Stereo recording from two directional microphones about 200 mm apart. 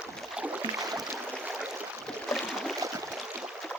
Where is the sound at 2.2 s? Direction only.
Centre (ahead or behind).